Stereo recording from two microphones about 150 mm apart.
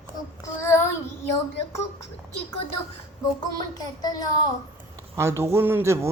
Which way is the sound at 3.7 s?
25° left (ahead or behind).